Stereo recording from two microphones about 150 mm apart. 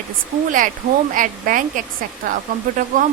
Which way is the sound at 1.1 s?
60° right (ahead or behind).